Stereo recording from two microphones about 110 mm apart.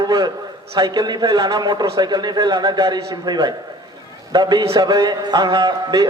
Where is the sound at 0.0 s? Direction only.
40° right (ahead or behind).